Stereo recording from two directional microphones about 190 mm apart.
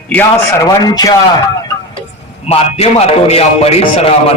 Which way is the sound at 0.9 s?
20° left (ahead or behind).